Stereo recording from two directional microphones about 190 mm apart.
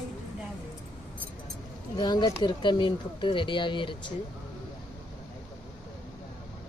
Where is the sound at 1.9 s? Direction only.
20° left (ahead or behind).